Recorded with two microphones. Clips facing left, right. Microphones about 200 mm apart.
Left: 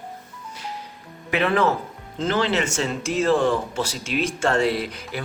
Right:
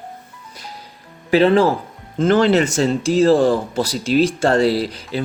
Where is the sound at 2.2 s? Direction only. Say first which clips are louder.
Right 8 dB; 50° right (ahead or behind).